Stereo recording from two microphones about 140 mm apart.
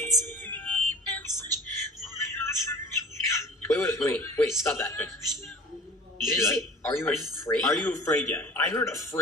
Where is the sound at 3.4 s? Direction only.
20° left (ahead or behind).